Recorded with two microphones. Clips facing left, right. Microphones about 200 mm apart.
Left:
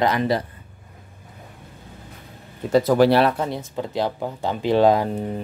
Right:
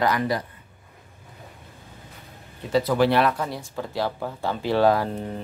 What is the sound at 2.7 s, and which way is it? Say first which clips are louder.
Speech: left 5 dB; 45° left (ahead or behind).